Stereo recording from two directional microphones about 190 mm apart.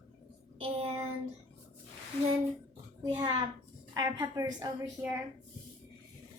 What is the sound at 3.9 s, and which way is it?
A woman's voice, 20° right (ahead or behind).